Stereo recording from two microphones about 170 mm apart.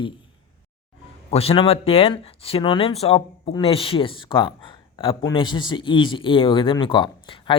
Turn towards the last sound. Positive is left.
turn(degrees=30)  # may be behind; listen again after turning